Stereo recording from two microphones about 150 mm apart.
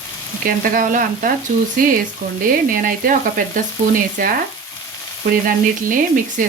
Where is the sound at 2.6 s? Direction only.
65° right (ahead or behind).